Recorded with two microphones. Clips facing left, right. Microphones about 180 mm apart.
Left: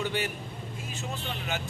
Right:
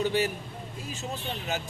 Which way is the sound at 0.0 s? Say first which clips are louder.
Right 5 dB; 40° right (ahead or behind).